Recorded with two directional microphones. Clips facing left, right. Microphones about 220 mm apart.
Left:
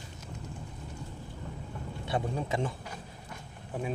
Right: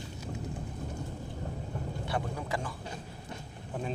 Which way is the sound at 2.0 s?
25° left (ahead or behind).